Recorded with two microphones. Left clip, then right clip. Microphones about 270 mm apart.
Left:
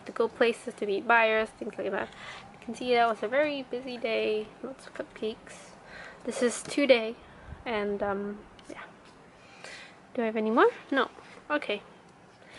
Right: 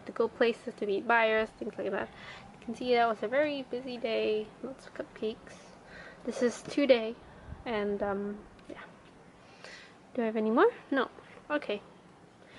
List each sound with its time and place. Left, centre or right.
0.4 s a woman's voice: centre
6.4 s a woman's voice: centre
10.1 s speech: centre